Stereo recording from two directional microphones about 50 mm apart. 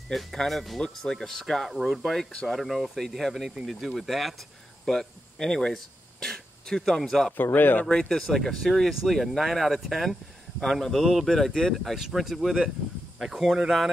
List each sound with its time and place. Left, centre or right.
0.1 s speech: centre
1.7 s speech: centre
7.5 s speech: left
7.8 s speech: centre